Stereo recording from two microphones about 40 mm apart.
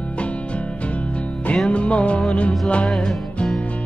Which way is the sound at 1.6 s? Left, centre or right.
Left.